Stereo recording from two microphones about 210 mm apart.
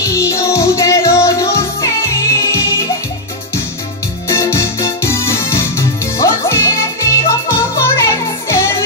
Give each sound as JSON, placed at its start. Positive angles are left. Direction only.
{"t": 0.0, "sound": "music", "side_deg": 15}
{"t": 4.3, "sound": "music", "side_deg": 15}